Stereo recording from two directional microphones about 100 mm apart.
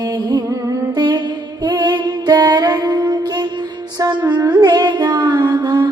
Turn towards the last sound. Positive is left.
turn(degrees=-45)  # may be behind; listen again after turning